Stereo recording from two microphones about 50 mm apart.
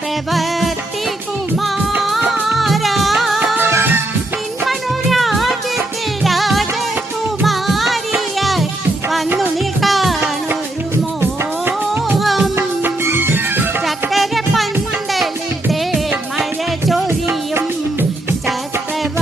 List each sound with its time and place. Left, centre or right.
0.3 s music: centre
2.0 s music: centre
4.6 s music: centre
11.2 s music: right
12.1 s music: centre
12.8 s music: right
13.8 s music: centre
17.1 s music: right